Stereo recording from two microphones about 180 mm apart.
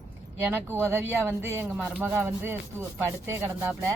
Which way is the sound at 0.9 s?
15° right (ahead or behind).